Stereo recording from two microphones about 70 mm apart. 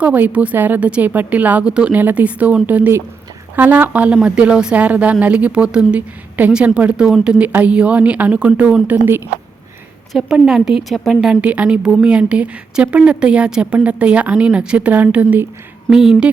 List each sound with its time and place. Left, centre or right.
0.0 s a woman's voice: right
10.1 s a woman's voice: centre
11.3 s a woman's voice: right
15.9 s a woman's voice: centre